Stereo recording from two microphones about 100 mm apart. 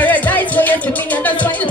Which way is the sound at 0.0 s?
15° left (ahead or behind).